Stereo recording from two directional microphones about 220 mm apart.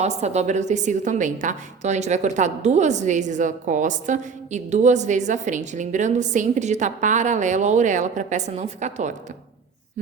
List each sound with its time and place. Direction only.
0.0 s a woman's voice: 30° right (ahead or behind)